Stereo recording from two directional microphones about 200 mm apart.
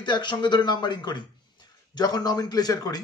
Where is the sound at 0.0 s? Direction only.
25° left (ahead or behind).